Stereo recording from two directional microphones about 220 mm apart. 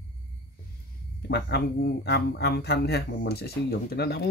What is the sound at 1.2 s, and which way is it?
Speech, 45° left (ahead or behind).